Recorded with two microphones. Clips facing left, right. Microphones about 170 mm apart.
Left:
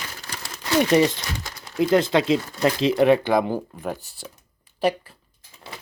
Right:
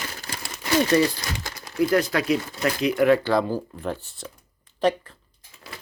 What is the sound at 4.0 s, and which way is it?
Speech, 40° left (ahead or behind).